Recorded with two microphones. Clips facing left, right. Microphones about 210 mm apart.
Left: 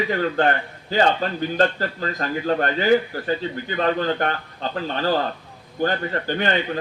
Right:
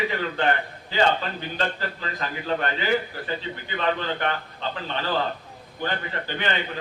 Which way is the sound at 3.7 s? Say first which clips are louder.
Left 5 dB; 45° left (ahead or behind).